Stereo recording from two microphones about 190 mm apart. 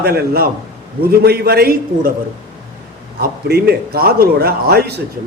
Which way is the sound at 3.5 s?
55° right (ahead or behind).